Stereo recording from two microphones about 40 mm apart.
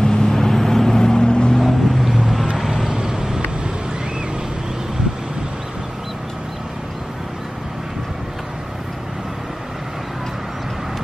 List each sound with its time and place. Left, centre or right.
0.0 s vehicle: centre
1.6 s vehicle: centre